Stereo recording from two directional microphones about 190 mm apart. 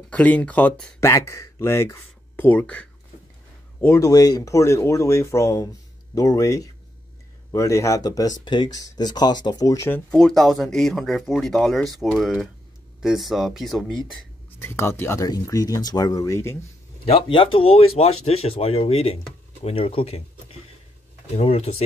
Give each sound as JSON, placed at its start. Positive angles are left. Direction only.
{"t": 0.1, "sound": "speech", "side_deg": 10}
{"t": 14.6, "sound": "speech", "side_deg": 10}
{"t": 17.0, "sound": "speech", "side_deg": 30}
{"t": 21.4, "sound": "speech", "side_deg": 35}